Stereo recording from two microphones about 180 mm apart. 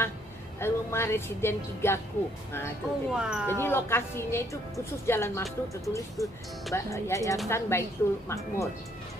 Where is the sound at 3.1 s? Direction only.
5° right (ahead or behind).